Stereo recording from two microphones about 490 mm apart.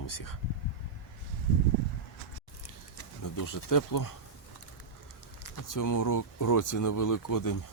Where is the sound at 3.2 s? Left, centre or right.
Left.